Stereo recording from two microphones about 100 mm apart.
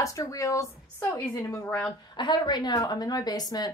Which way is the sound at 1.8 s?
45° left (ahead or behind).